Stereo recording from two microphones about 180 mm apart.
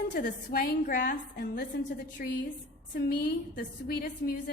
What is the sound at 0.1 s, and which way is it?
A woman's voice, 55° left (ahead or behind).